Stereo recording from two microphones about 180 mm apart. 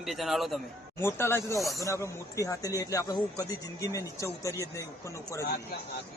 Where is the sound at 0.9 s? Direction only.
15° left (ahead or behind).